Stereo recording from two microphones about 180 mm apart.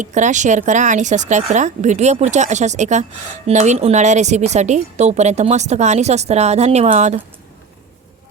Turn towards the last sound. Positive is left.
turn(degrees=-40)  # may be behind; listen again after turning